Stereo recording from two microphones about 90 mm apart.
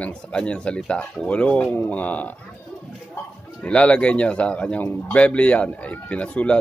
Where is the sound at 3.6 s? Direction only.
15° left (ahead or behind).